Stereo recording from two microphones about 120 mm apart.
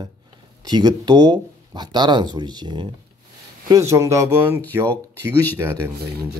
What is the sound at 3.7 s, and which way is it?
Speech, 25° right (ahead or behind).